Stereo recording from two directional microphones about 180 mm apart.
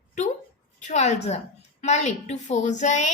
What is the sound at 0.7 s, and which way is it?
A woman's voice, 40° left (ahead or behind).